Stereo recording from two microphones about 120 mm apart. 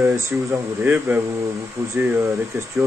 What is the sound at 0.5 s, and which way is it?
Speech, 15° right (ahead or behind).